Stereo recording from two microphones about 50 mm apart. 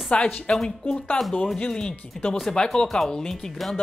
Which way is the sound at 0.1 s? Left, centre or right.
Left.